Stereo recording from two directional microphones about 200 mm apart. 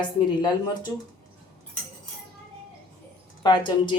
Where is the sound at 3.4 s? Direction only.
25° left (ahead or behind).